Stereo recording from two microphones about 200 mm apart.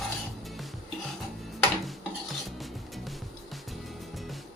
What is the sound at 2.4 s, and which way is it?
Music, centre (ahead or behind).